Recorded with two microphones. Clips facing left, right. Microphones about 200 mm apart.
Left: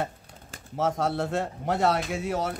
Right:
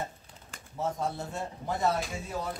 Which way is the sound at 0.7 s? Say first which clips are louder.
Left 6 dB; 90° left.